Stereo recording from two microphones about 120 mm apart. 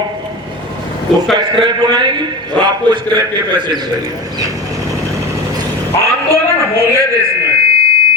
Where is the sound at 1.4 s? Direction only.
40° right (ahead or behind).